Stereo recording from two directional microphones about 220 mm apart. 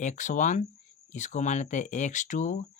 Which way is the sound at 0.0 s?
35° left (ahead or behind).